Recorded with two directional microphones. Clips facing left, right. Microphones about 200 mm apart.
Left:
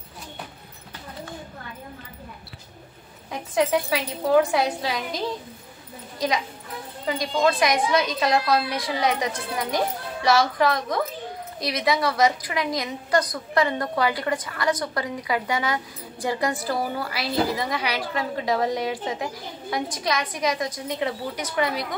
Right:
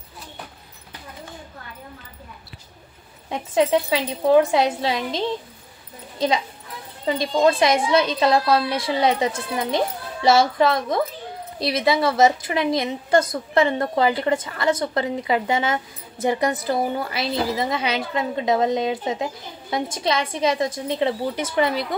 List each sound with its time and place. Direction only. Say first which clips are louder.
3.3 s a woman's voice: right 3 dB; 25° right (ahead or behind)